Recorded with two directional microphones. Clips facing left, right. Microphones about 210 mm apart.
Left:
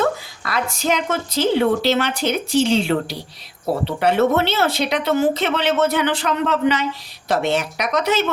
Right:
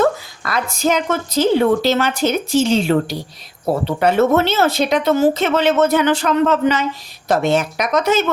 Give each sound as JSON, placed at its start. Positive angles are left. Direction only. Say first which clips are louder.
{"t": 0.0, "sound": "a woman's voice", "louder": "right 4 dB", "side_deg": -45}